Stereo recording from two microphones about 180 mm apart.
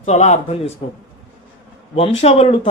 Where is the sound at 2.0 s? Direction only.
35° left (ahead or behind).